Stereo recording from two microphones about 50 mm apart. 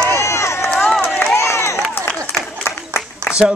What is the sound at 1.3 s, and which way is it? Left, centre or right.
Crowd, left.